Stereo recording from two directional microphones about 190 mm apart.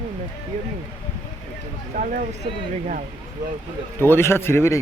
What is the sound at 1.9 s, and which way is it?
Speech, 40° right (ahead or behind).